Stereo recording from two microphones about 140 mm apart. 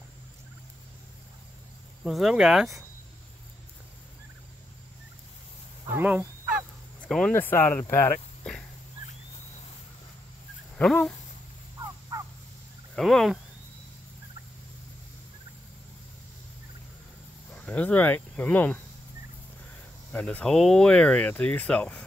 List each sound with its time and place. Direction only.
2.0 s speech: centre (ahead or behind)
5.9 s a sound: 15° right (ahead or behind)
7.0 s speech: 5° left (ahead or behind); by 8.2 s 20° left (ahead or behind)
10.8 s speech: 5° left (ahead or behind)
11.8 s crow: 20° right (ahead or behind)
12.9 s speech: centre (ahead or behind)
17.6 s speech: 10° left (ahead or behind)
20.1 s speech: 10° left (ahead or behind)